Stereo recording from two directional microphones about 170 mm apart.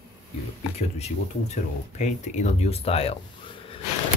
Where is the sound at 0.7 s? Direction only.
40° left (ahead or behind).